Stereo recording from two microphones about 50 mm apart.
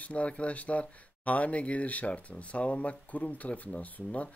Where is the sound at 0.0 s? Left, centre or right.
Left.